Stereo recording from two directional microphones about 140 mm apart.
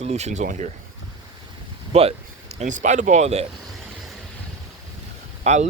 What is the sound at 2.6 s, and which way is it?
Speech, 60° right (ahead or behind).